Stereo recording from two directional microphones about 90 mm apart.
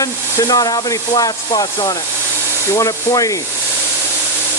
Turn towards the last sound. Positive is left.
turn(degrees=40)  # may be behind; listen again after turning